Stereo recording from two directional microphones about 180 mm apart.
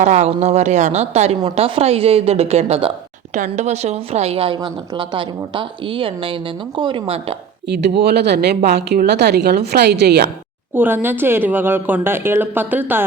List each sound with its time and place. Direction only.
0.0 s a woman's voice: 40° right (ahead or behind)
7.7 s speech: 65° right (ahead or behind)
10.8 s a woman's voice: 10° right (ahead or behind)